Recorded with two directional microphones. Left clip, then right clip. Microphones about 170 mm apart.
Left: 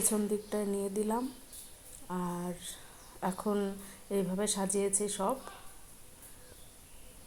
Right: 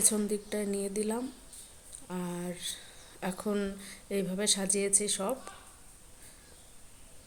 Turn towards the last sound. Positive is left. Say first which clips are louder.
# right 1 dB
turn(degrees=-10)  # may be behind; listen again after turning